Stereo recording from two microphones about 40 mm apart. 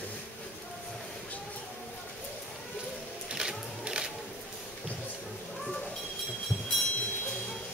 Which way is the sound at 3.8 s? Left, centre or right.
Right.